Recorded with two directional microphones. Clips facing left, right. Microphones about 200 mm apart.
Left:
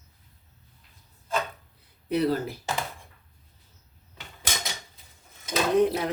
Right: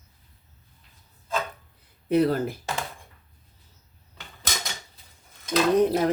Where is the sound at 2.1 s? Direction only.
50° right (ahead or behind).